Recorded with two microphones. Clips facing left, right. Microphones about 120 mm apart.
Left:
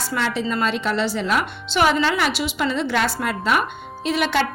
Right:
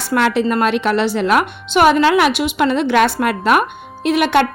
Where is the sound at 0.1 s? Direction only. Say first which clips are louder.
Right 9 dB; 65° right (ahead or behind).